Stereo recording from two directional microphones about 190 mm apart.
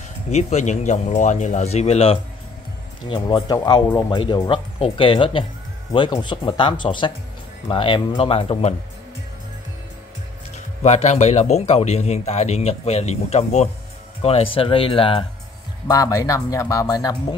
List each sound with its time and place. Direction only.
0.3 s a man's voice: 35° left (ahead or behind)
10.8 s a man's voice: 35° left (ahead or behind)
15.9 s speech: 20° left (ahead or behind)